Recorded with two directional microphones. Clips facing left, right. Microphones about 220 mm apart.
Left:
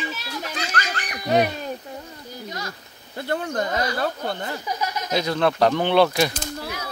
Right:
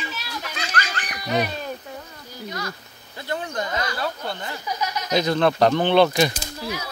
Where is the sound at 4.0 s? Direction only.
50° left (ahead or behind).